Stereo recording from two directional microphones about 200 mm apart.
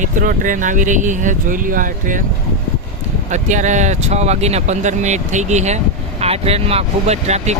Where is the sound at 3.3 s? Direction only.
35° right (ahead or behind).